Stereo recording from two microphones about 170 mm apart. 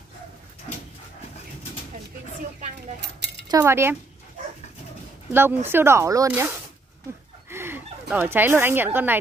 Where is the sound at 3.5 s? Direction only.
15° right (ahead or behind).